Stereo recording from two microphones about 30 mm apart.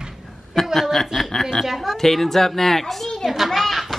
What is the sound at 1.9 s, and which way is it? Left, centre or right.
A child's voice, centre.